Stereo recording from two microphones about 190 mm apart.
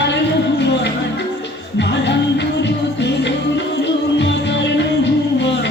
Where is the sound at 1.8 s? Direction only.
65° left (ahead or behind).